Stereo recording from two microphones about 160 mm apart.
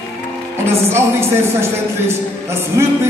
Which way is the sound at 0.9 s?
15° right (ahead or behind).